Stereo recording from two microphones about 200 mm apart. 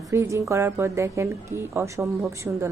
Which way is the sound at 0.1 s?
15° right (ahead or behind).